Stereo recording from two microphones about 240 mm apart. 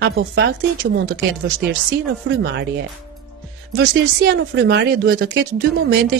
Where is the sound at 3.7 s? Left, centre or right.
Right.